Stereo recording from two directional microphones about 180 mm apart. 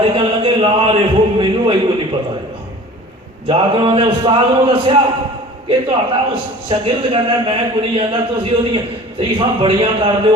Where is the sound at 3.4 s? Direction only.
30° right (ahead or behind).